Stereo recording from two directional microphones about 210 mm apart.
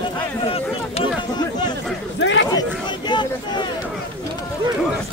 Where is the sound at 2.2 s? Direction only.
60° left (ahead or behind).